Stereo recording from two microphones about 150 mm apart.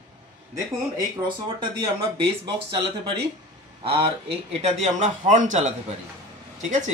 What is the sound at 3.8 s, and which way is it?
A man's voice, 40° right (ahead or behind).